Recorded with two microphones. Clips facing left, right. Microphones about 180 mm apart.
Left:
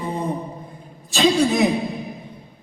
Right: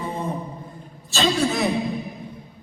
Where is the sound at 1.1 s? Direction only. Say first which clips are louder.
Left 4 dB; 15° left (ahead or behind).